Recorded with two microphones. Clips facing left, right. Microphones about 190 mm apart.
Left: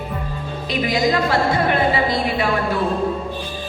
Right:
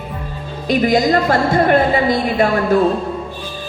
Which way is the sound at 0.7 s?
45° right (ahead or behind).